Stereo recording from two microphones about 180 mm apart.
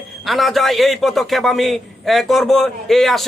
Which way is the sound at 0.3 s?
Centre (ahead or behind).